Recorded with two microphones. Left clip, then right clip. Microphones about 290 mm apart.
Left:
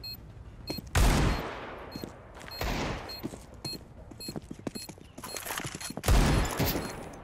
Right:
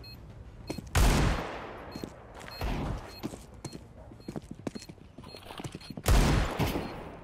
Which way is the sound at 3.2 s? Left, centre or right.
Centre.